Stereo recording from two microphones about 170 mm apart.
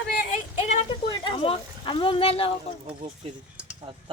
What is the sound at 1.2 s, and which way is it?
Speech, 30° left (ahead or behind).